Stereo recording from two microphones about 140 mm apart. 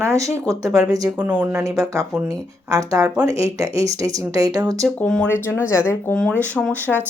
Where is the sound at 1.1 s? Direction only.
10° right (ahead or behind).